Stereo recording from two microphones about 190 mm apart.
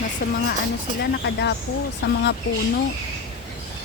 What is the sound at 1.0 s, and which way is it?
Speech, 60° left (ahead or behind).